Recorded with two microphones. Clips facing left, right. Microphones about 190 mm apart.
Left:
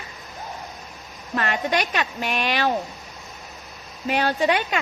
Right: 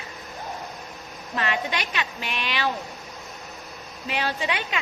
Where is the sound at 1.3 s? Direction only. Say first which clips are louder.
Left 4 dB; 45° left (ahead or behind).